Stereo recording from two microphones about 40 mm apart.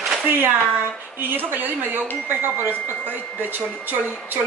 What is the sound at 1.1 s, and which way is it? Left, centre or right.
Speech, right.